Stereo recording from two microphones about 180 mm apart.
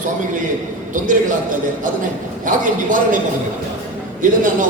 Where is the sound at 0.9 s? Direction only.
45° right (ahead or behind).